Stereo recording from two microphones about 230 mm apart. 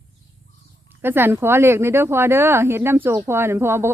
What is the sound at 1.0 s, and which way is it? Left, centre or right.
Speech, centre.